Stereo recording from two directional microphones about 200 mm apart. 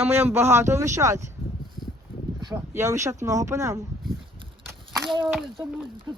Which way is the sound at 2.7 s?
15° right (ahead or behind).